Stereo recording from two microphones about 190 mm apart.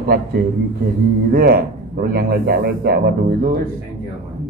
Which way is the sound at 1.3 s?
55° right (ahead or behind).